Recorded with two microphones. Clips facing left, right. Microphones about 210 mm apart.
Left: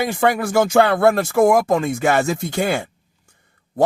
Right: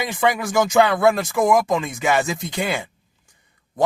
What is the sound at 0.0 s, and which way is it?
Speech, 40° left (ahead or behind).